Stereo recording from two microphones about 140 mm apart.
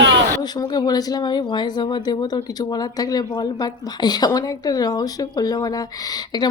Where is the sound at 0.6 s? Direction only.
30° left (ahead or behind).